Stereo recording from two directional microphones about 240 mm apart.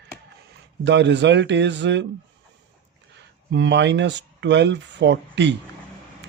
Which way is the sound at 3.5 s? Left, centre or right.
Right.